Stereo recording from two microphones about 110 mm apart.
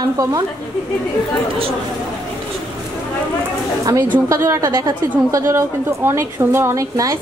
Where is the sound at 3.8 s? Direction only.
35° right (ahead or behind).